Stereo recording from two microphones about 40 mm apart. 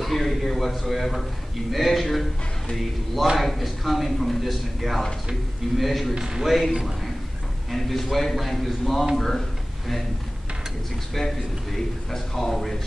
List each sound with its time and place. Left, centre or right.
0.0 s a man's voice: centre
3.3 s speech: centre
6.1 s a man's voice: centre
6.4 s speech: centre
7.7 s speech: centre
11.1 s speech: centre